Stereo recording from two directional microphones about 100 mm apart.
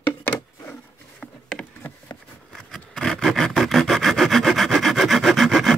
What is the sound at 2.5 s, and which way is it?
Rub, 5° left (ahead or behind).